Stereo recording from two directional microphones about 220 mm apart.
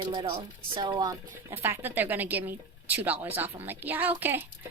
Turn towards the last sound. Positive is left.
turn(degrees=-10)  # may be behind; listen again after turning